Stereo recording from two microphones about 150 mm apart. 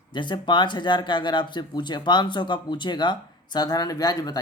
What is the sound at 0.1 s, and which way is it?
Speech, 30° left (ahead or behind).